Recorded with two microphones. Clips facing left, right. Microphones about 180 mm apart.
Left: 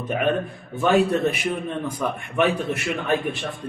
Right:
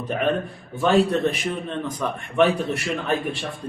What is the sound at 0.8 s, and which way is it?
A man's voice, 10° left (ahead or behind).